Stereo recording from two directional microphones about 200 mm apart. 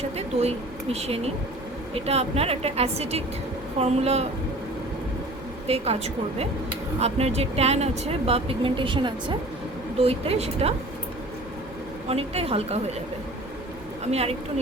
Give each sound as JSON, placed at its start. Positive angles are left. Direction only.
{"t": 0.2, "sound": "a woman's voice", "side_deg": -30}
{"t": 5.6, "sound": "a woman's voice", "side_deg": -30}
{"t": 12.0, "sound": "a woman's voice", "side_deg": -30}
{"t": 14.1, "sound": "a woman's voice", "side_deg": -30}